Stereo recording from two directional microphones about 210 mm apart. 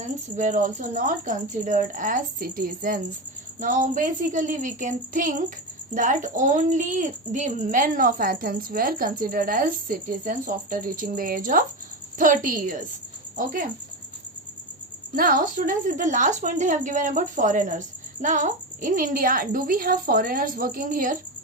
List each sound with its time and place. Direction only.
0.0 s a woman's voice: 35° right (ahead or behind)
15.1 s a woman's voice: 40° right (ahead or behind)